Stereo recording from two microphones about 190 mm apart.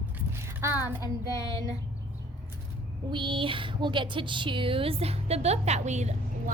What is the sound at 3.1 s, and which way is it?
A woman's voice, 25° right (ahead or behind).